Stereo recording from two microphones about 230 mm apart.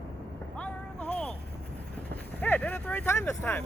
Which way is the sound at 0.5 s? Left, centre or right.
Centre.